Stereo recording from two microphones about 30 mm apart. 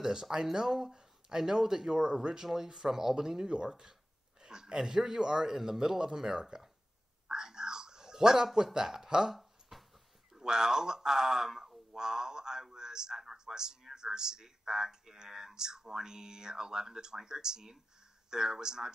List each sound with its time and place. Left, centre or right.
0.0 s speech: centre
4.4 s a sound: right
4.7 s speech: centre
7.2 s whispering: right
8.7 s speech: centre
9.3 s a sound: centre
10.3 s speech: centre
12.7 s a sound: right
13.2 s a man's voice: centre